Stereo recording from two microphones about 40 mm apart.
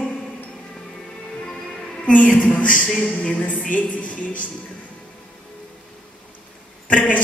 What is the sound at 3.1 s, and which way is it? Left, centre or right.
A woman's voice, left.